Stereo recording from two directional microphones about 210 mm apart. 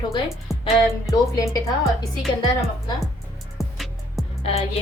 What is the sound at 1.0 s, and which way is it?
A woman's voice, 20° left (ahead or behind).